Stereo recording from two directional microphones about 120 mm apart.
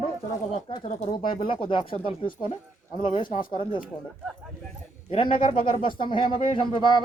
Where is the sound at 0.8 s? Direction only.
70° left (ahead or behind).